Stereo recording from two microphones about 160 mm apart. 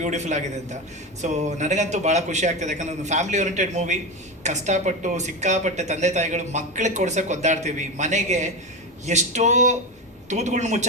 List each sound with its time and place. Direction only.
0.0 s speech: 45° right (ahead or behind)